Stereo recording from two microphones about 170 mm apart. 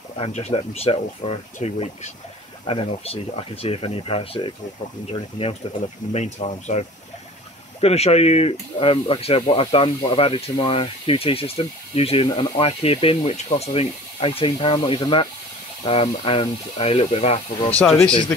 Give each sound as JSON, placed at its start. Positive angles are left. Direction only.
{"t": 0.2, "sound": "speech", "side_deg": 40}
{"t": 17.6, "sound": "speech", "side_deg": 5}